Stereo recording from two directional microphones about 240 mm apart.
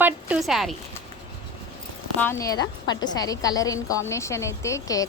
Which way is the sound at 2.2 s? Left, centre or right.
Centre.